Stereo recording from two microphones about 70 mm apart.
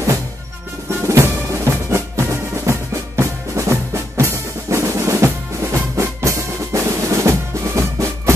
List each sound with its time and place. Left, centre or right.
1.0 s music: right
3.2 s drum: right